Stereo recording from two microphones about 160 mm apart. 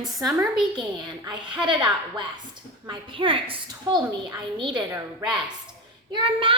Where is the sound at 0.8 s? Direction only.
30° right (ahead or behind).